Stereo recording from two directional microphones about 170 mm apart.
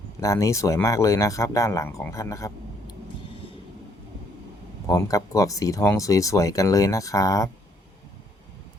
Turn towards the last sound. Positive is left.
turn(degrees=20)  # may be behind; listen again after turning